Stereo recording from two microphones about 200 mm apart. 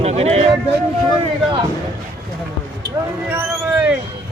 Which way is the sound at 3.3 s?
10° right (ahead or behind).